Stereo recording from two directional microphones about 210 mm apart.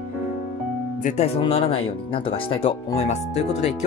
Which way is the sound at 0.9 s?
35° left (ahead or behind).